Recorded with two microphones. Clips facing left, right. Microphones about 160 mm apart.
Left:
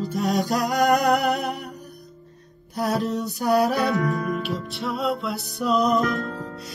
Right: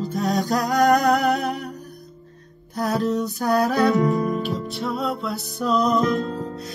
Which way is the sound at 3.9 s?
20° right (ahead or behind).